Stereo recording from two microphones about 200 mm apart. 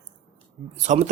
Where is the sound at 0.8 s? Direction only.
35° right (ahead or behind).